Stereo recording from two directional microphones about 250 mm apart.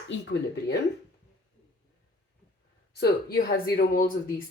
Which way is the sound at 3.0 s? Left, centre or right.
Left.